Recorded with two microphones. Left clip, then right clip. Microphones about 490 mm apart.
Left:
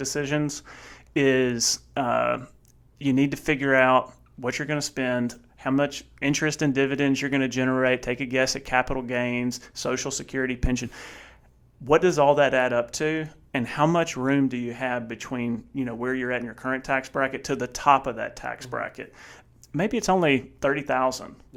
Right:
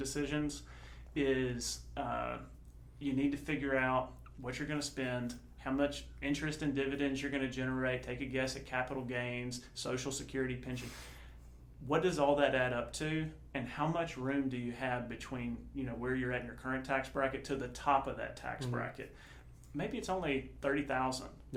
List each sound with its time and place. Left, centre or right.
0.0 s speech: left
11.9 s speech: left